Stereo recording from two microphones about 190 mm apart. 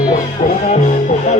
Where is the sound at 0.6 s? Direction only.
35° left (ahead or behind).